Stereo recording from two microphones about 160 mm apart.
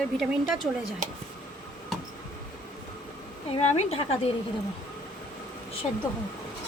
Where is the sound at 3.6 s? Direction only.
45° left (ahead or behind).